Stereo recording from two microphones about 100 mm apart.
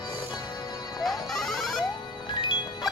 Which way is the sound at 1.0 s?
Centre (ahead or behind).